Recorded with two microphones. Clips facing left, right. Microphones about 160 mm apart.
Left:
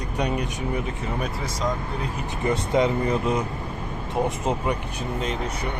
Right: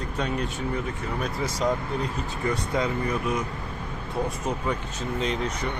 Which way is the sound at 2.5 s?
20° left (ahead or behind).